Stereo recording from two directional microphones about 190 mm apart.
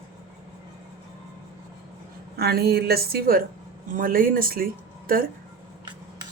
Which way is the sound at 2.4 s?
55° right (ahead or behind).